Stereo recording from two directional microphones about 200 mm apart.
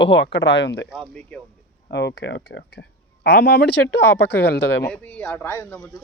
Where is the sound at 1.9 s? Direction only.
60° left (ahead or behind).